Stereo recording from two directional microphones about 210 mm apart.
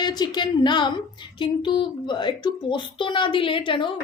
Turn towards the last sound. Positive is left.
turn(degrees=25)  # may be behind; listen again after turning